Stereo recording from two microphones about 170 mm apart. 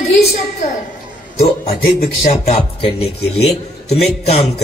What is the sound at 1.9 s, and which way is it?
Speech, 60° left (ahead or behind).